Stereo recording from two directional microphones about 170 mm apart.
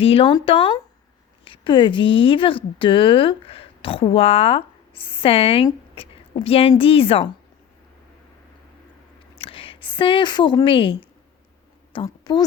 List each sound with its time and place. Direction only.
0.0 s speech: 35° left (ahead or behind)
9.3 s a woman's voice: 30° left (ahead or behind)